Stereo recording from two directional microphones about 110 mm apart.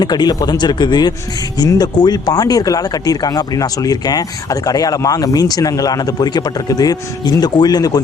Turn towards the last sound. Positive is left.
turn(degrees=35)  # may be behind; listen again after turning